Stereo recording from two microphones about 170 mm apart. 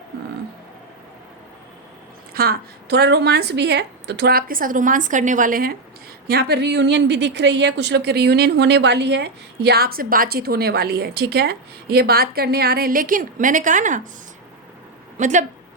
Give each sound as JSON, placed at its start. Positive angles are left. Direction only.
{"t": 2.3, "sound": "a woman's voice", "side_deg": -60}
{"t": 6.2, "sound": "a woman's voice", "side_deg": -70}
{"t": 15.2, "sound": "speech", "side_deg": -45}